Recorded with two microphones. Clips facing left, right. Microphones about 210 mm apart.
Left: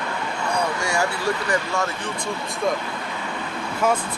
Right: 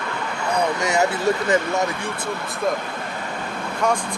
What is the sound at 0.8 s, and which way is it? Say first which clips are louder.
Speech: right 4 dB; 20° right (ahead or behind).